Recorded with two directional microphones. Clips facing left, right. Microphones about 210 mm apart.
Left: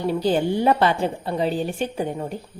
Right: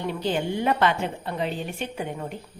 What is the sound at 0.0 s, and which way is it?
Speech, 35° left (ahead or behind).